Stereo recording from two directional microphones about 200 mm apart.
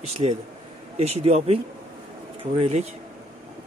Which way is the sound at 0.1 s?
30° right (ahead or behind).